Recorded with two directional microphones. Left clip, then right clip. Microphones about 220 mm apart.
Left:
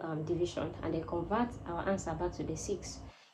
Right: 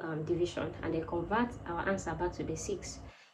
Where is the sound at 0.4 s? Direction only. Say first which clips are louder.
Right 1 dB; 10° left (ahead or behind).